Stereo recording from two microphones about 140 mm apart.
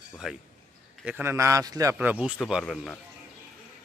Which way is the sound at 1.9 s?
10° right (ahead or behind).